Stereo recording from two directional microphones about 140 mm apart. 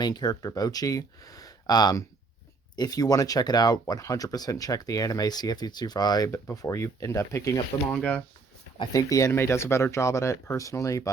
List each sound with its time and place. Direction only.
0.0 s speech: 30° left (ahead or behind)
7.9 s speech: 10° left (ahead or behind)
8.8 s speech: 25° left (ahead or behind)